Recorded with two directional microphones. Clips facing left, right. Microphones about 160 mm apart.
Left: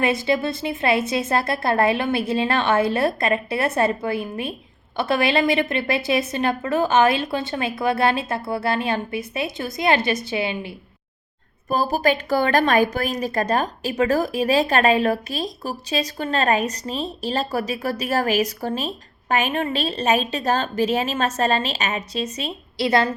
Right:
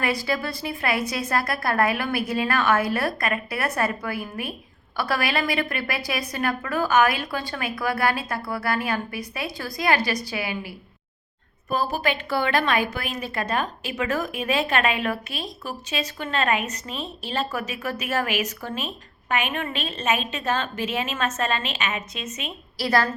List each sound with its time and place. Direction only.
0.0 s a woman's voice: 25° left (ahead or behind)
11.7 s a woman's voice: 40° left (ahead or behind)
22.8 s a woman's voice: 20° left (ahead or behind)